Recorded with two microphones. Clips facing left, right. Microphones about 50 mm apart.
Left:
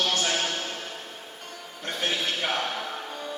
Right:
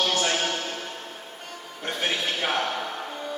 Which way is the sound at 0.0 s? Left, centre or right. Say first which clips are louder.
Right 2 dB; centre.